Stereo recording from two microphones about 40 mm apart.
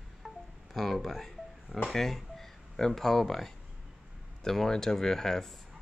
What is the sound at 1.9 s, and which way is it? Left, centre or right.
Speech, centre.